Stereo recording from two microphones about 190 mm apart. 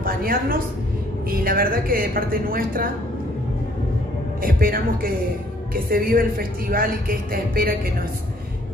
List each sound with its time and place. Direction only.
0.0 s a woman's voice: 50° right (ahead or behind)
4.4 s speech: 50° right (ahead or behind)